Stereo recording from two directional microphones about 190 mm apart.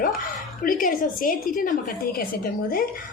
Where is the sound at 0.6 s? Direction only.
45° left (ahead or behind).